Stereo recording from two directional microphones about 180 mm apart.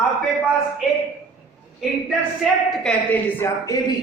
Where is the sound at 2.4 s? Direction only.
5° left (ahead or behind).